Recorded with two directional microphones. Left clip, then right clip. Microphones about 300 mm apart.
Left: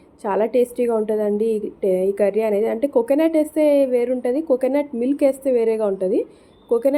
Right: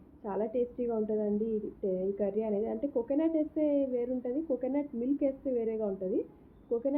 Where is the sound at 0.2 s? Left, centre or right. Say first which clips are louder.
Left 14 dB; left.